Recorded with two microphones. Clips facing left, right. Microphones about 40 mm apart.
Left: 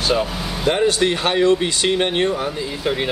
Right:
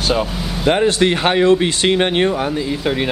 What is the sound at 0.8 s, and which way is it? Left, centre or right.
A man's voice, right.